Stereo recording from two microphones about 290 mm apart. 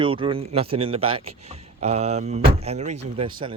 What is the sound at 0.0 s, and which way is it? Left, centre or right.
Speech, centre.